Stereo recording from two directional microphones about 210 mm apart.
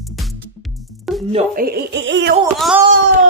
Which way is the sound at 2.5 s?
Centre (ahead or behind).